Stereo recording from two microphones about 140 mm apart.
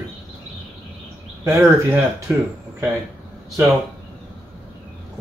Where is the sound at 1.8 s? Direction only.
15° right (ahead or behind).